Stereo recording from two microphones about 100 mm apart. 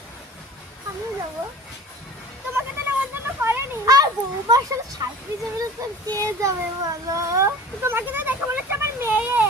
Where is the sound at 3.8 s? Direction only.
40° right (ahead or behind).